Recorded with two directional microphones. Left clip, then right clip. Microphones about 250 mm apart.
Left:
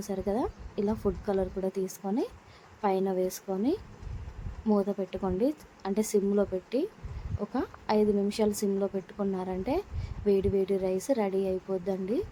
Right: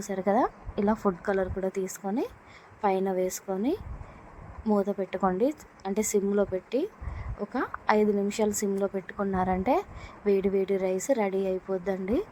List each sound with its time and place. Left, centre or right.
0.0 s a woman's voice: centre